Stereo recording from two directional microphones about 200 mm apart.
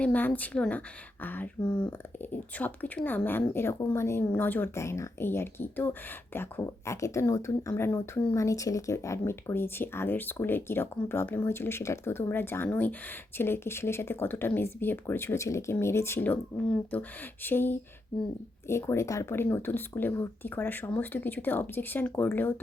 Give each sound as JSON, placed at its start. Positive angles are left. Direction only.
{"t": 0.0, "sound": "speech", "side_deg": 10}